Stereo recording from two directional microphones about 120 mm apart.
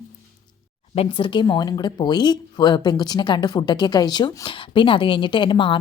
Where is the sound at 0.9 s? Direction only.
45° left (ahead or behind).